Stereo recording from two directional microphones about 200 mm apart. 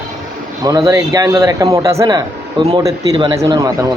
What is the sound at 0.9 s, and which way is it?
Speech, 15° right (ahead or behind).